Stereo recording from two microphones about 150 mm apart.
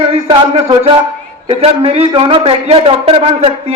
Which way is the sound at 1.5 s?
45° right (ahead or behind).